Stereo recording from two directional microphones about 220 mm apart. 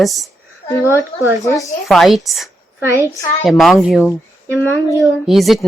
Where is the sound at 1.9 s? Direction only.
Centre (ahead or behind).